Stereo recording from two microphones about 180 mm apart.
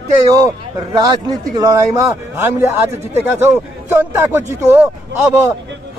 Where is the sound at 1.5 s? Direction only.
20° right (ahead or behind).